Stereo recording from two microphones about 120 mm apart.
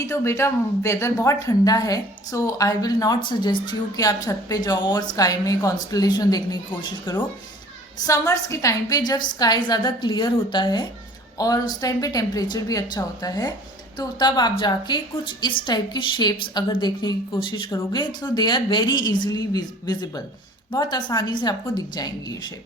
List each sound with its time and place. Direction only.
0.1 s a woman's voice: 25° left (ahead or behind)